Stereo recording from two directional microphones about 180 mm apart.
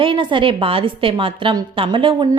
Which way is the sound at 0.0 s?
25° right (ahead or behind).